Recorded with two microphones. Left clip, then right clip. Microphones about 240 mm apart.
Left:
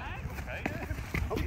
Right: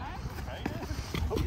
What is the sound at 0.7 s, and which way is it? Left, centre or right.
Basketball bounce, centre.